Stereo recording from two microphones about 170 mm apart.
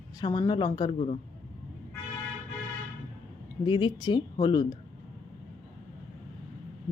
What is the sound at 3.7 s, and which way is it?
A woman's voice, 25° left (ahead or behind).